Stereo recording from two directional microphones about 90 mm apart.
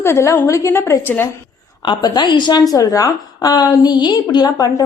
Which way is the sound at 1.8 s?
65° left (ahead or behind).